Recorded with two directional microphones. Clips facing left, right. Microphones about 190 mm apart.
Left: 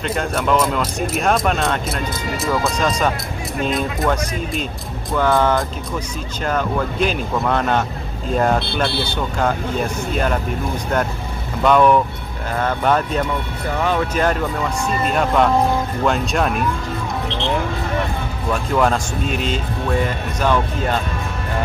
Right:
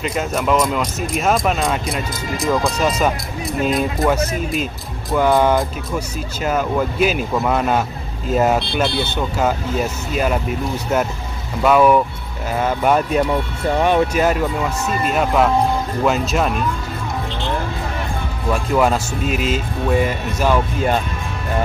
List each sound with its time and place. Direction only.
0.0 s speech: 5° right (ahead or behind)
4.1 s speech: 5° right (ahead or behind)
9.4 s speech: 5° right (ahead or behind)
11.6 s speech: 5° right (ahead or behind)
13.7 s speech: 20° right (ahead or behind)
14.1 s speech: 5° right (ahead or behind)
18.5 s speech: 5° right (ahead or behind)